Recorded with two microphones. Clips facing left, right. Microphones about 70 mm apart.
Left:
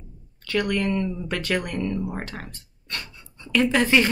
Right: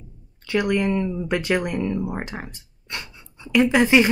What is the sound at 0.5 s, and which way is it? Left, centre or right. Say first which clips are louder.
Speech: right 3 dB; centre.